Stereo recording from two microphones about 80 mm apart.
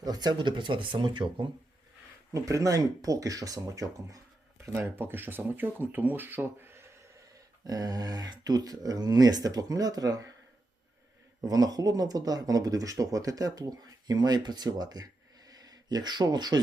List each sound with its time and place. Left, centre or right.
0.0 s speech: right
2.3 s speech: right
4.6 s speech: right
7.6 s speech: right
11.4 s speech: right